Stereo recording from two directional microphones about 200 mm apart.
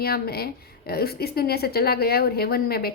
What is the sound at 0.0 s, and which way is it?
A woman's voice, 50° left (ahead or behind).